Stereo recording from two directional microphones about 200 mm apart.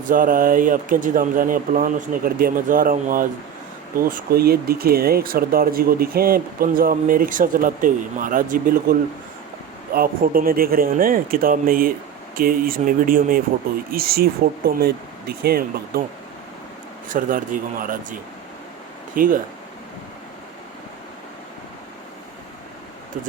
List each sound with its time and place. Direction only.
0.1 s speech: 45° right (ahead or behind)
17.1 s speech: 45° right (ahead or behind)